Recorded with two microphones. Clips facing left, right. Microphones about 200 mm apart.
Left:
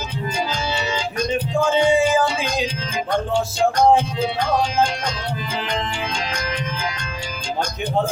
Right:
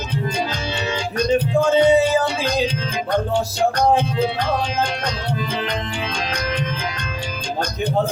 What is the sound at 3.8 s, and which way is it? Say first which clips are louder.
Music: left 2 dB; 60° right (ahead or behind).